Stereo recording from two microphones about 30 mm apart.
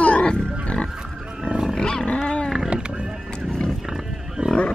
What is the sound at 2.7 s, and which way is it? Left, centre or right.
Music, right.